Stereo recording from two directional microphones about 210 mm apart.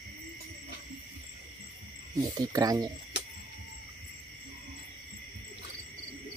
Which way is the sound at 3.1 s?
55° left (ahead or behind).